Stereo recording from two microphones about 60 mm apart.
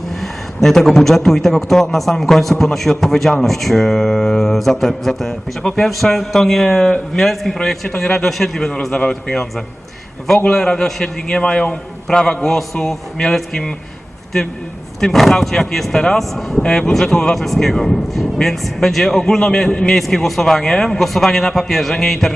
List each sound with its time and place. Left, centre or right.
0.2 s a man's voice: centre
15.0 s speech: centre